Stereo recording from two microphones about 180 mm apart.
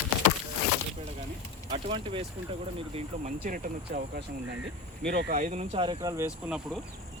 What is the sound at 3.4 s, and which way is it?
Speech, 50° right (ahead or behind).